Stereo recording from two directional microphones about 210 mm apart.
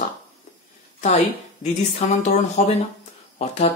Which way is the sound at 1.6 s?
35° left (ahead or behind).